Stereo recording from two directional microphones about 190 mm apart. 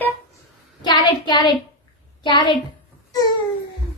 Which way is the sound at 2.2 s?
25° left (ahead or behind).